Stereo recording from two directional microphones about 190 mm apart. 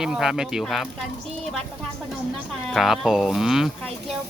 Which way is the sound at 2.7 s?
Centre (ahead or behind).